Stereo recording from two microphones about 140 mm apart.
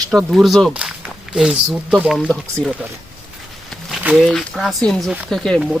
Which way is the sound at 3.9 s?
5° right (ahead or behind).